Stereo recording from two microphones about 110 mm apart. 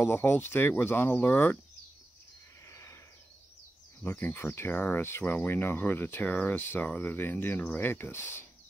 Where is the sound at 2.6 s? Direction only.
25° left (ahead or behind).